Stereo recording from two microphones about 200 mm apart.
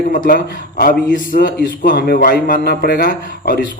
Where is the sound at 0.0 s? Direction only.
45° left (ahead or behind).